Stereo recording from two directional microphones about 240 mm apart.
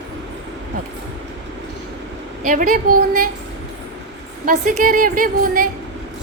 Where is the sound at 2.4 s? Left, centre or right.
Right.